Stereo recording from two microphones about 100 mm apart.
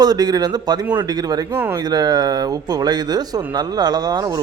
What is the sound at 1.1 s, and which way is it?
Speech, 40° right (ahead or behind).